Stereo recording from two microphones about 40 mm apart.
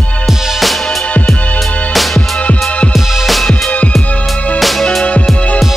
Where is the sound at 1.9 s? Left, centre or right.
Centre.